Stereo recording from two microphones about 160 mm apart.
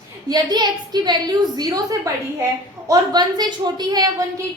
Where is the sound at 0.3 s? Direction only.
25° right (ahead or behind).